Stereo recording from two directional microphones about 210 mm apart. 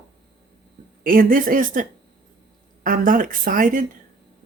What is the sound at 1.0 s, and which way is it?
Speech, 40° right (ahead or behind).